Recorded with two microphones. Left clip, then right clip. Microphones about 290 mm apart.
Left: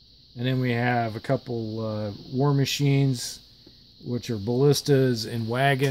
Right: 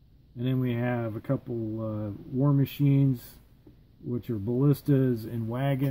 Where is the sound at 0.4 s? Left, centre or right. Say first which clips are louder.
Left 4 dB; left.